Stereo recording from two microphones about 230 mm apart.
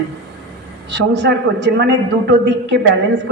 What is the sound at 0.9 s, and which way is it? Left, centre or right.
A man's voice, right.